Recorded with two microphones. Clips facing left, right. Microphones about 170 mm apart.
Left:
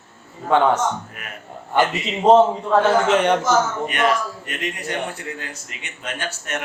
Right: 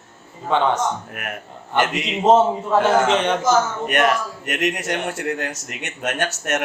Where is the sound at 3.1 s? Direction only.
10° left (ahead or behind).